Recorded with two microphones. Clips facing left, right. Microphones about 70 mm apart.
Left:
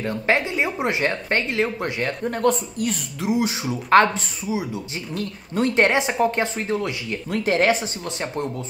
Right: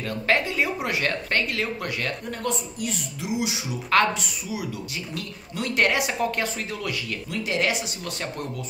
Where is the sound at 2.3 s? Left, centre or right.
Left.